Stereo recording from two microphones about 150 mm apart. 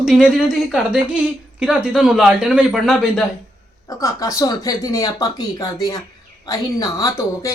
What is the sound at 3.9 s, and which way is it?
Speech, 20° left (ahead or behind).